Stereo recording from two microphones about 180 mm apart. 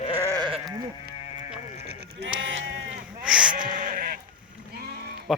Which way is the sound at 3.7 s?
50° right (ahead or behind).